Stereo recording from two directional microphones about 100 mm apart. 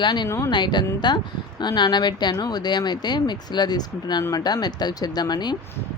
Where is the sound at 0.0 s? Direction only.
50° left (ahead or behind).